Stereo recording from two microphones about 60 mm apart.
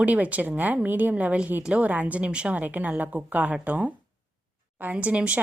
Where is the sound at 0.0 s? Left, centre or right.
Right.